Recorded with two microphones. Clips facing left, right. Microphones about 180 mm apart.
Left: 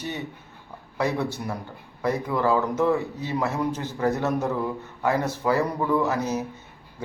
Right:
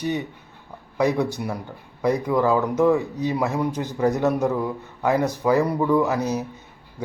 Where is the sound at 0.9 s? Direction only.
15° right (ahead or behind).